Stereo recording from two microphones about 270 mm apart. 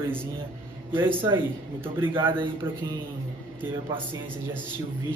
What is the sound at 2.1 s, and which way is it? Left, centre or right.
Speech, centre.